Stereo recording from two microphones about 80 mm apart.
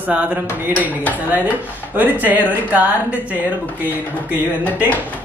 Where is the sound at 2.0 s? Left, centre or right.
Right.